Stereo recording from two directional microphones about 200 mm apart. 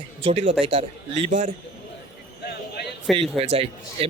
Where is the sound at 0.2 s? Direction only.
25° right (ahead or behind).